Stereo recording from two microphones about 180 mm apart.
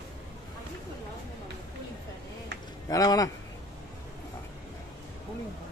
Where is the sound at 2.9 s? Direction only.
20° left (ahead or behind).